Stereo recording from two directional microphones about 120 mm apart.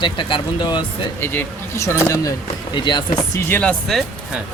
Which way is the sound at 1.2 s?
20° left (ahead or behind).